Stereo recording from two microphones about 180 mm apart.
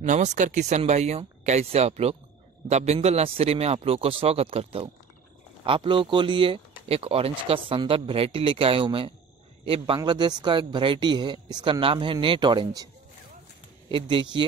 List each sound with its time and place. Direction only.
0.0 s speech: 40° right (ahead or behind); by 14.4 s 25° right (ahead or behind)